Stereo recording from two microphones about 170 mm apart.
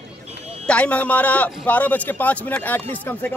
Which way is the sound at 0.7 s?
10° left (ahead or behind).